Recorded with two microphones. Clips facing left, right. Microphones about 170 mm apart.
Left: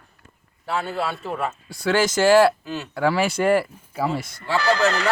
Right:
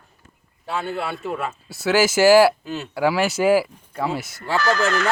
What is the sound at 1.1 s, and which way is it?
Speech, 20° right (ahead or behind).